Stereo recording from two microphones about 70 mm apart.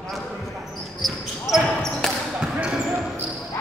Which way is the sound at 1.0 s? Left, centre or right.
Centre.